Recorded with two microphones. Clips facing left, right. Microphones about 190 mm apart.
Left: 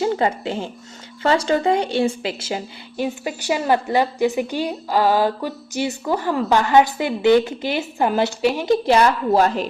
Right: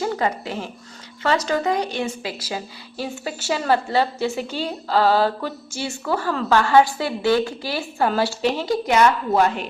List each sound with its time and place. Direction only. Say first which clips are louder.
0.0 s a woman's voice: left 3 dB; 25° left (ahead or behind)
8.6 s a woman's voice: left 2 dB; 25° left (ahead or behind)